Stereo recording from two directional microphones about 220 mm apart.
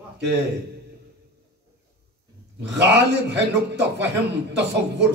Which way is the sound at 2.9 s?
50° right (ahead or behind).